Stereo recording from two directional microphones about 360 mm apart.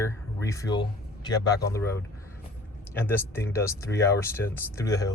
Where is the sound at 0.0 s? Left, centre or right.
Centre.